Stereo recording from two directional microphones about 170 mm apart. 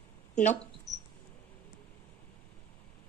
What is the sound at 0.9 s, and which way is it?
Cricket, 20° right (ahead or behind).